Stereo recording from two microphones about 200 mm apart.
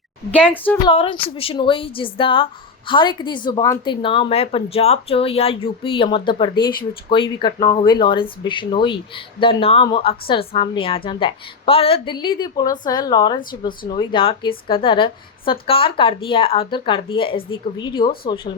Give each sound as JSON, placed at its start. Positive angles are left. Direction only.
{"t": 0.5, "sound": "speech", "side_deg": 10}
{"t": 0.9, "sound": "a woman's voice", "side_deg": 25}
{"t": 7.6, "sound": "speech", "side_deg": 40}
{"t": 7.9, "sound": "a woman's voice", "side_deg": 25}